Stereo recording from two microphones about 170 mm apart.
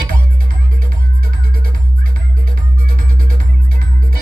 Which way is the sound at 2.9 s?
55° right (ahead or behind).